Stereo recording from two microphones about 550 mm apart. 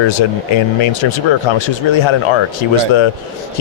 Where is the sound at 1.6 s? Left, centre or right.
Left.